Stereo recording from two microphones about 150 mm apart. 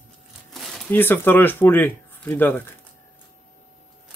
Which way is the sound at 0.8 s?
15° left (ahead or behind).